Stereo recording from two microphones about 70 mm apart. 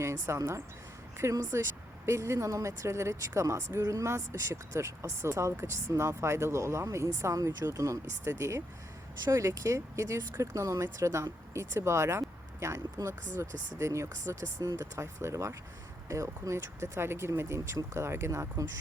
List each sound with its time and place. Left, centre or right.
0.0 s speech: right